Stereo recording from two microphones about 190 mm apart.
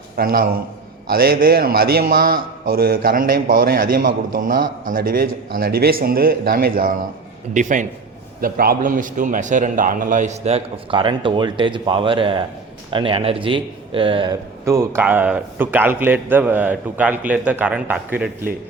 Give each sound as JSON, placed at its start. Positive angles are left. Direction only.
{"t": 0.2, "sound": "a man's voice", "side_deg": -50}
{"t": 14.6, "sound": "a man's voice", "side_deg": -15}